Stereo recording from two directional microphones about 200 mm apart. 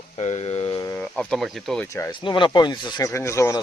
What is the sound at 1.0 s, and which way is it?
Speech, 5° left (ahead or behind).